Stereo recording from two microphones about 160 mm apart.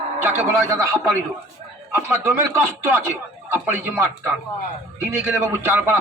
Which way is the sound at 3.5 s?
10° right (ahead or behind).